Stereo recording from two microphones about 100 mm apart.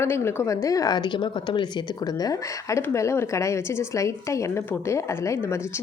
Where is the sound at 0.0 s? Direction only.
25° left (ahead or behind).